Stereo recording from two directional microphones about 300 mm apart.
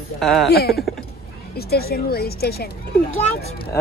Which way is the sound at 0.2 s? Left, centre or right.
Centre.